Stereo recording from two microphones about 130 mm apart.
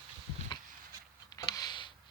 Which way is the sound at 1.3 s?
30° left (ahead or behind).